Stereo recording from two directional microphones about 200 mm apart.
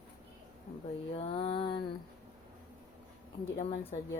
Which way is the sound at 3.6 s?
30° left (ahead or behind).